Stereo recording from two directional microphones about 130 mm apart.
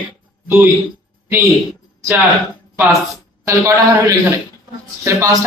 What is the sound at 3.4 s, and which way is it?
A man's voice, 25° right (ahead or behind).